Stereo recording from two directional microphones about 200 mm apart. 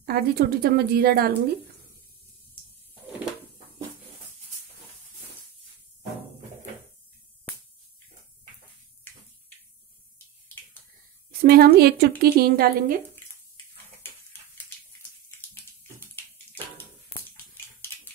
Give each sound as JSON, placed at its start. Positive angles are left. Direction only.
{"t": 0.0, "sound": "a woman's voice", "side_deg": -50}
{"t": 11.4, "sound": "a woman's voice", "side_deg": -50}
{"t": 16.7, "sound": "bathtub", "side_deg": 10}